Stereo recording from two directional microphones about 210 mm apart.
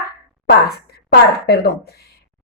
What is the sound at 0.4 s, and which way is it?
A woman's voice, 50° left (ahead or behind).